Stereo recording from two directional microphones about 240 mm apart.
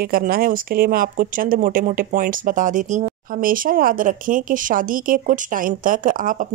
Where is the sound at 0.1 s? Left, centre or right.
Right.